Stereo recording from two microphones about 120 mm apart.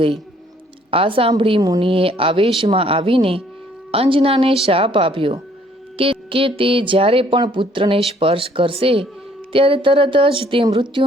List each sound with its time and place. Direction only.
0.9 s speech: 50° right (ahead or behind)